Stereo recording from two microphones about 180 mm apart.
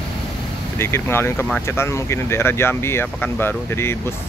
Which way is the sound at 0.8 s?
15° left (ahead or behind).